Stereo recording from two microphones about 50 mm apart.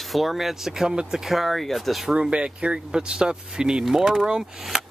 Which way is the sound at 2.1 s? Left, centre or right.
Centre.